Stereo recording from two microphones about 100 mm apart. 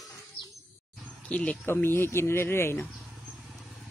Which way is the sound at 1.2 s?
10° left (ahead or behind).